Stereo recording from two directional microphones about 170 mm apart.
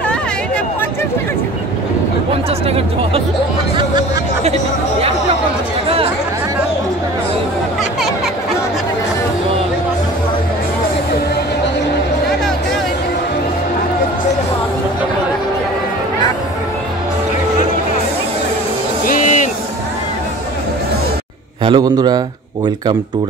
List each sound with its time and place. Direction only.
2.7 s speech: 35° right (ahead or behind)
19.0 s music: 50° left (ahead or behind)
21.6 s a man's voice: 25° right (ahead or behind)